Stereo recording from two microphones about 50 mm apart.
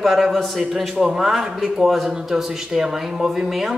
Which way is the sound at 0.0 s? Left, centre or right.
Centre.